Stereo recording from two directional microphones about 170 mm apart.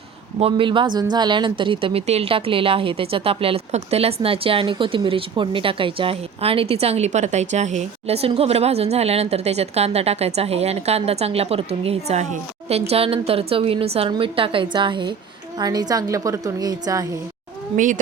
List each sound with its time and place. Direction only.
0.3 s a woman's voice: 30° right (ahead or behind)
17.7 s speech: 50° right (ahead or behind)